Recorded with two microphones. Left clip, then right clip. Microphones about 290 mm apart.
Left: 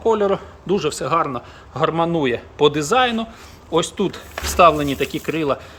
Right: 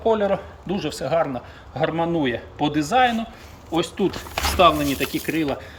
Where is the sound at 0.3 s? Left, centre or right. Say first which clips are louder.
Left 4 dB; centre.